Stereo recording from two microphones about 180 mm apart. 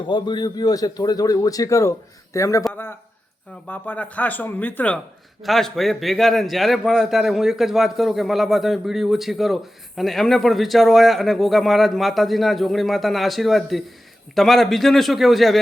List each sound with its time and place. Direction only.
0.1 s a man's voice: 25° left (ahead or behind)
3.7 s a man's voice: 10° left (ahead or behind)